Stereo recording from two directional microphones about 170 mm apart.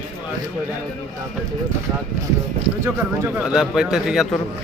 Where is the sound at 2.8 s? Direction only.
15° right (ahead or behind).